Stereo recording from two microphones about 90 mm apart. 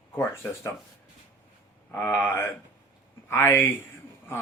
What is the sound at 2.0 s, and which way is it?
Speech, 20° left (ahead or behind).